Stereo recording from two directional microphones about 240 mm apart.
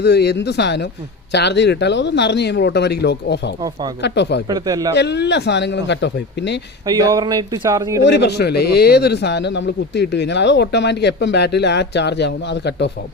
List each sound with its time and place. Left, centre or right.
0.0 s speech: left
3.6 s speech: centre
4.0 s speech: left
4.4 s speech: centre
4.9 s speech: left
6.8 s speech: centre
8.0 s speech: left